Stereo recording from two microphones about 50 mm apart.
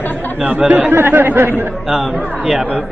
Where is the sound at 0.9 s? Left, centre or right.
Right.